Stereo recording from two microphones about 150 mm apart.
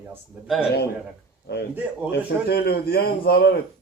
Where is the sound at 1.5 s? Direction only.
90° left.